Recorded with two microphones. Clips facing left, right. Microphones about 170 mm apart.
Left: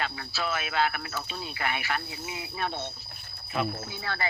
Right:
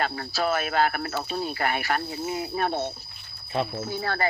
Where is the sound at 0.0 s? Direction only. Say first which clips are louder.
Right 6 dB; 40° right (ahead or behind).